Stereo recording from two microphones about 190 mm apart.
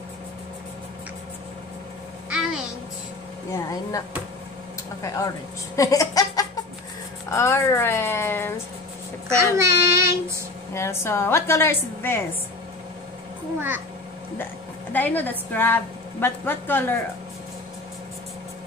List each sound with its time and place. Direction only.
2.2 s a sound: 5° right (ahead or behind)
5.0 s a woman's voice: 15° left (ahead or behind)
5.8 s a sound: 15° left (ahead or behind)
7.2 s a woman's voice: 15° left (ahead or behind)
9.3 s child singing: 15° right (ahead or behind)
10.7 s a woman's voice: 15° left (ahead or behind)
14.4 s a woman's voice: 10° left (ahead or behind)